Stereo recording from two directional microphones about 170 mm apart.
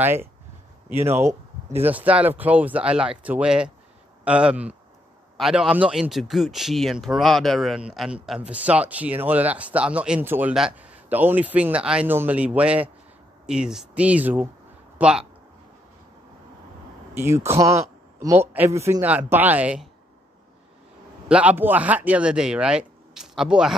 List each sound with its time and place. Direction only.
0.0 s speech: 15° right (ahead or behind)
17.1 s speech: 15° right (ahead or behind)
21.3 s speech: 10° right (ahead or behind)